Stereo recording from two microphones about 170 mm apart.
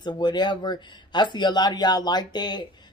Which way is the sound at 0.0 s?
25° left (ahead or behind).